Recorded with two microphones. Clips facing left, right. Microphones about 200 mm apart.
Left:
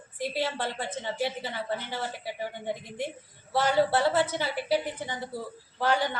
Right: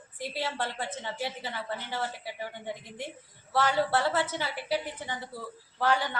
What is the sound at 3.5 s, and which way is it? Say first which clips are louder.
A woman's voice: left 3 dB; 15° left (ahead or behind).